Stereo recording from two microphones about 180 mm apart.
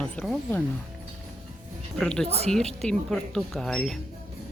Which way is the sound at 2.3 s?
35° right (ahead or behind).